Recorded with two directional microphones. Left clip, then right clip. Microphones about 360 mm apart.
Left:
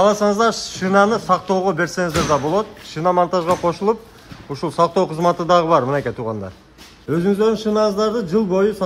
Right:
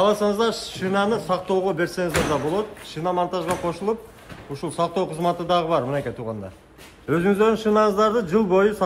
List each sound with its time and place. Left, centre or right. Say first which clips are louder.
0.0 s a man's voice: left 5 dB; centre